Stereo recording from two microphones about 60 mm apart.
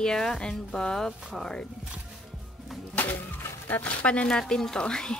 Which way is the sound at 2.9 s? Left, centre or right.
Left.